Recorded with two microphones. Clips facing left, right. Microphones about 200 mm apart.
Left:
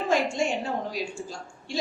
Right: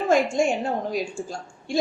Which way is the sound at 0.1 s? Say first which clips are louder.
Right 5 dB; 50° right (ahead or behind).